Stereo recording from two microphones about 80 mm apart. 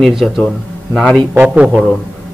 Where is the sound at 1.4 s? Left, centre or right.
Centre.